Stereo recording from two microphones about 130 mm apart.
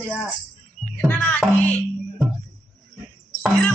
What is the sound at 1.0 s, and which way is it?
Music, 10° left (ahead or behind).